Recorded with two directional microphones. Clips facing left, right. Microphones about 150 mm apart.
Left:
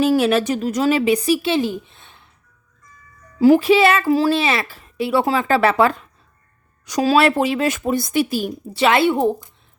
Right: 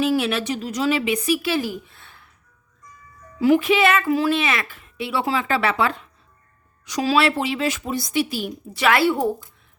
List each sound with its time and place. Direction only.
0.0 s speech: 40° left (ahead or behind); by 2.3 s 20° left (ahead or behind)
3.3 s a woman's voice: 35° left (ahead or behind)
8.7 s a woman's voice: 25° left (ahead or behind)